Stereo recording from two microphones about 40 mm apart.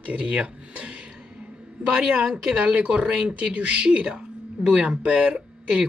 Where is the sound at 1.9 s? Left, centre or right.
Right.